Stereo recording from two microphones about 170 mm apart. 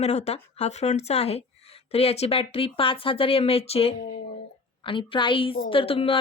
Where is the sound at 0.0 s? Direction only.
40° left (ahead or behind).